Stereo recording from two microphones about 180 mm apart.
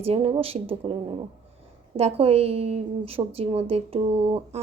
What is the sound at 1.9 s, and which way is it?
A woman's voice, 35° right (ahead or behind).